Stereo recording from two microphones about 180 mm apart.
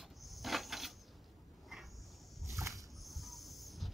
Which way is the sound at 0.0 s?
Centre (ahead or behind).